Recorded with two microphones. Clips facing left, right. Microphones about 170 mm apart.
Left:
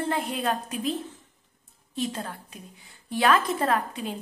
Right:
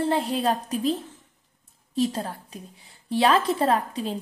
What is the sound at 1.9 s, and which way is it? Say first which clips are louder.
A woman's voice: right 6 dB; 35° right (ahead or behind).